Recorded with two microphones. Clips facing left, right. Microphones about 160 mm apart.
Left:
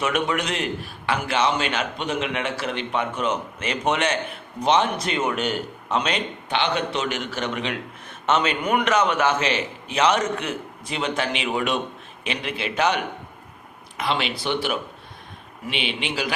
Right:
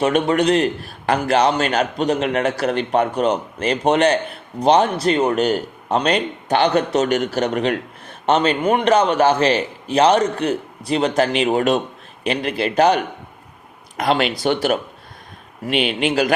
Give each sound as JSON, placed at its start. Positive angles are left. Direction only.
{"t": 0.0, "sound": "a man's voice", "side_deg": -35}